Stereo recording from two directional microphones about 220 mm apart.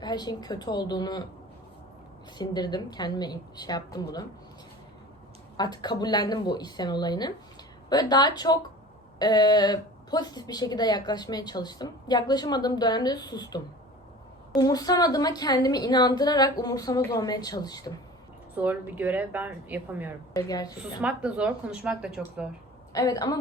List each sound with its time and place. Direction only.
0.0 s a woman's voice: 20° left (ahead or behind)
2.4 s a woman's voice: 20° left (ahead or behind)
5.5 s a woman's voice: 20° left (ahead or behind)
14.6 s a woman's voice: 15° left (ahead or behind)
18.5 s speech: 5° right (ahead or behind)
20.3 s a woman's voice: 15° left (ahead or behind)
21.0 s speech: 5° right (ahead or behind)
22.9 s a woman's voice: 15° left (ahead or behind)